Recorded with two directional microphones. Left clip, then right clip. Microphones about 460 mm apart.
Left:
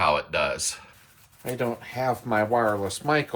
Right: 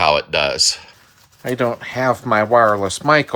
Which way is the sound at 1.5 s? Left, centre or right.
Centre.